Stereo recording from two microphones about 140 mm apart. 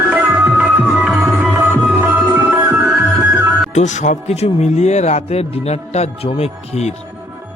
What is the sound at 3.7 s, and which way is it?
Speech, 60° left (ahead or behind).